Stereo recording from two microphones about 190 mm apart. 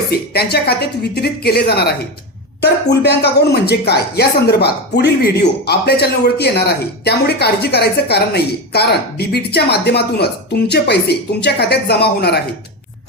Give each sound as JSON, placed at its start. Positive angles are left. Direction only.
{"t": 0.1, "sound": "speech", "side_deg": 55}
{"t": 3.0, "sound": "speech", "side_deg": 60}